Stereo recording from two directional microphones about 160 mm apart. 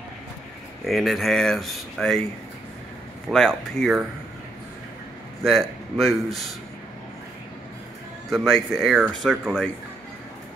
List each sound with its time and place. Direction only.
0.8 s speech: centre (ahead or behind)
3.3 s speech: centre (ahead or behind)
5.4 s speech: centre (ahead or behind)
8.3 s speech: centre (ahead or behind)